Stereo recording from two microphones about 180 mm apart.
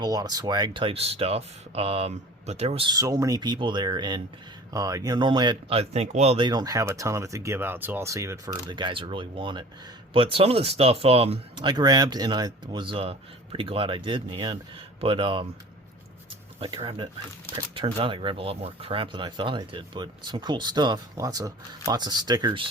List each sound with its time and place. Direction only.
0.0 s speech: 20° right (ahead or behind)
2.9 s speech: 20° right (ahead or behind)
16.6 s speech: 25° right (ahead or behind)